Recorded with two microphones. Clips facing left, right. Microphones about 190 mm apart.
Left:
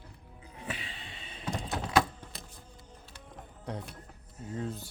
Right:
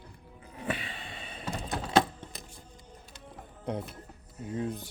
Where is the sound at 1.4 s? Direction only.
5° right (ahead or behind).